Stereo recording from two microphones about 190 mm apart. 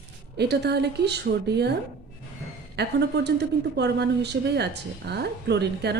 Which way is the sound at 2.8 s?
60° right (ahead or behind).